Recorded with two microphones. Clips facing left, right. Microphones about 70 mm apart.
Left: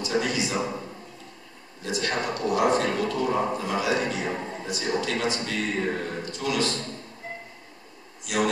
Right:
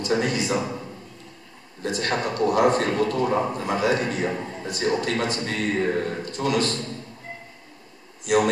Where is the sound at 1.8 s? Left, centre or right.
Right.